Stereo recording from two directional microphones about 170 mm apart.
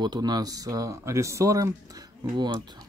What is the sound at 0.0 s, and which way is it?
Speech, 25° right (ahead or behind).